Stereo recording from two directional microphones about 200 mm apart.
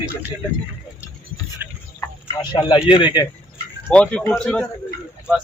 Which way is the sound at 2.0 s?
20° left (ahead or behind).